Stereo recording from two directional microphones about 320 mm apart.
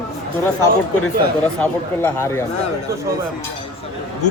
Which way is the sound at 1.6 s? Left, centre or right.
Centre.